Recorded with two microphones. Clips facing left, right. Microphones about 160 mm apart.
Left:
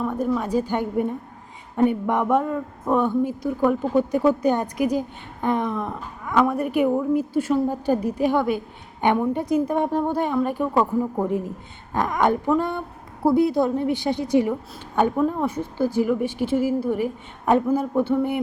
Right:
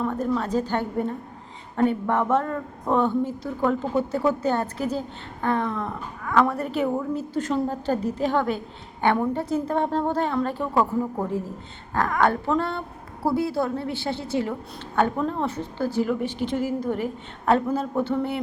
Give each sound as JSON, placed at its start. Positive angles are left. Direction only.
{"t": 0.0, "sound": "speech", "side_deg": 10}
{"t": 11.9, "sound": "speech", "side_deg": 15}